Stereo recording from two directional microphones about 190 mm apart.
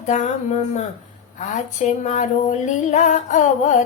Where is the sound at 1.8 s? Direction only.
40° left (ahead or behind).